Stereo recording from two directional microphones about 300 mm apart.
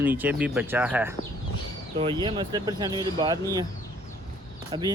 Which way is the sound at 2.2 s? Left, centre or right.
Centre.